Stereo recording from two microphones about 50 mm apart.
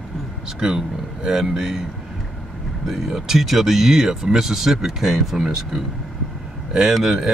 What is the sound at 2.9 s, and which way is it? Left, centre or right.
A man's voice, centre.